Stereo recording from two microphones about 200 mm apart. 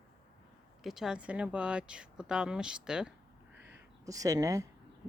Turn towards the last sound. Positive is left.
turn(degrees=-15)  # may be behind; listen again after turning